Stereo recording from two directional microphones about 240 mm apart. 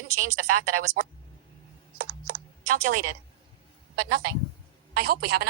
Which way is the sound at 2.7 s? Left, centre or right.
Right.